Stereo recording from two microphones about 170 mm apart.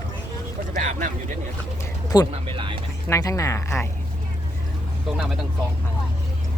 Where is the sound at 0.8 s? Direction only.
45° right (ahead or behind).